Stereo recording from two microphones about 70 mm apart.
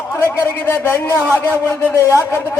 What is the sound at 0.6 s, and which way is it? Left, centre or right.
A man's voice, left.